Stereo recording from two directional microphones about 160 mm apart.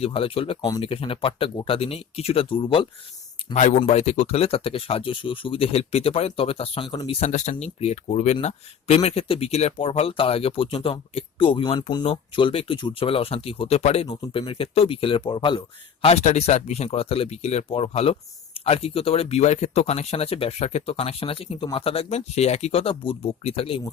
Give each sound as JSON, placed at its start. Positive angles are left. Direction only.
{"t": 0.0, "sound": "speech", "side_deg": 35}
{"t": 3.5, "sound": "speech", "side_deg": 45}
{"t": 7.2, "sound": "speech", "side_deg": 45}